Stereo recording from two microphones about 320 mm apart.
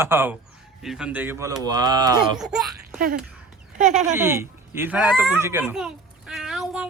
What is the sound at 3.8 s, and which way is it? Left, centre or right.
Speech, right.